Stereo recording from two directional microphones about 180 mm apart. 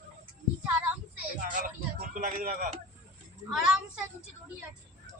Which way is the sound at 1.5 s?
50° right (ahead or behind).